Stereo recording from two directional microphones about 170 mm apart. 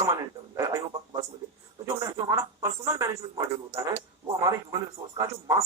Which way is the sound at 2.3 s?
20° right (ahead or behind).